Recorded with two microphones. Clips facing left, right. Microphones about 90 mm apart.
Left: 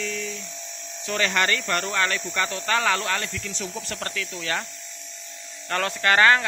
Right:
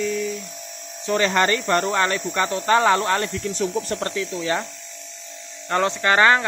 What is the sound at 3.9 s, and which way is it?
Speech, 25° right (ahead or behind).